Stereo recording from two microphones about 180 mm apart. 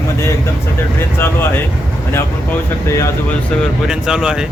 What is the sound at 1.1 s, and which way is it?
Speech, 10° left (ahead or behind).